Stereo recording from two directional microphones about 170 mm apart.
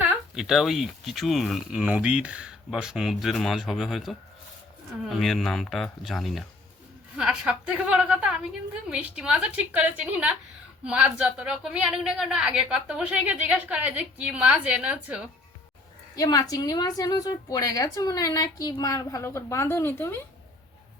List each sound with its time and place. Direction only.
0.0 s speech: 5° right (ahead or behind)
7.2 s a sound: 5° right (ahead or behind)
8.9 s a woman's voice: 5° right (ahead or behind)
16.1 s a woman's voice: 20° left (ahead or behind)